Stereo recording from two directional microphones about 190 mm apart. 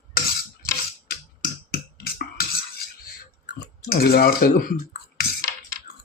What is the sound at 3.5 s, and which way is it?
Speech, 55° left (ahead or behind).